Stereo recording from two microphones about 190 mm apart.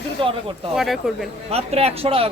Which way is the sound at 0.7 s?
Centre (ahead or behind).